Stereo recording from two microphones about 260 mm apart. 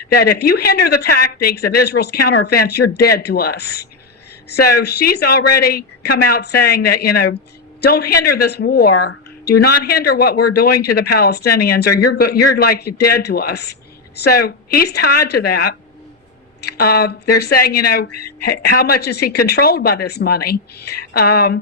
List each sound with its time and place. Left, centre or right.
0.1 s a woman's voice: left